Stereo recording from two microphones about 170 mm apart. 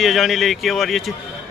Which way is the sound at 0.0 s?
Centre (ahead or behind).